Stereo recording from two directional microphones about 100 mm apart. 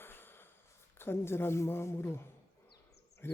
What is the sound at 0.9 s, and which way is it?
Speech, 25° left (ahead or behind).